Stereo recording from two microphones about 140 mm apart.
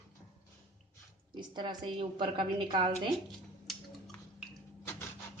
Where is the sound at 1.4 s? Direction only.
30° right (ahead or behind).